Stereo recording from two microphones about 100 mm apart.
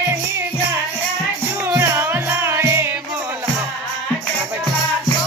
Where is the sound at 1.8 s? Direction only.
25° right (ahead or behind).